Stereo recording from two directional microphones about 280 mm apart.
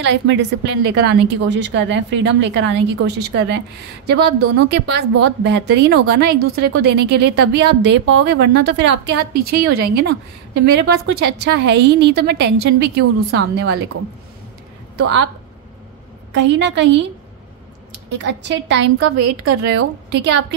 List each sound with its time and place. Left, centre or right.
0.0 s a woman's voice: right
15.0 s a woman's voice: right
16.3 s a woman's voice: right
18.1 s a woman's voice: right
20.1 s a woman's voice: right